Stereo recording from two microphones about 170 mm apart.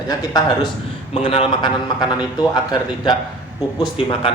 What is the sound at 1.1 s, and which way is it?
Speech, 35° left (ahead or behind).